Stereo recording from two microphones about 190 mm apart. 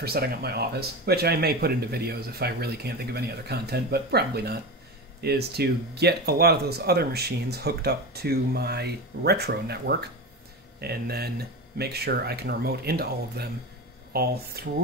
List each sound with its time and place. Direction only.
0.0 s speech: 55° right (ahead or behind)